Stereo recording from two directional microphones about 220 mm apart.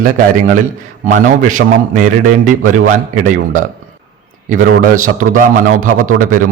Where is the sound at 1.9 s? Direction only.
35° right (ahead or behind).